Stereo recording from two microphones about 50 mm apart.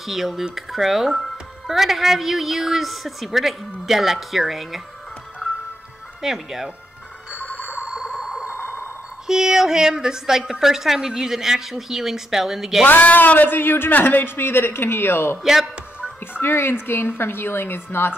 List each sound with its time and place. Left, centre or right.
0.0 s speech: centre
6.2 s a woman's voice: centre
7.5 s a sound: right
7.9 s music: centre
8.5 s music: right
9.3 s a woman's voice: centre
12.8 s a man's voice: left
16.3 s a man's voice: left